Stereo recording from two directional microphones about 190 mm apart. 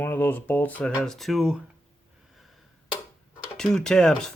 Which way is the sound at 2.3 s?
Centre (ahead or behind).